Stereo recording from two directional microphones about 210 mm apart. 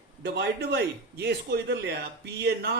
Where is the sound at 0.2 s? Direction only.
50° right (ahead or behind).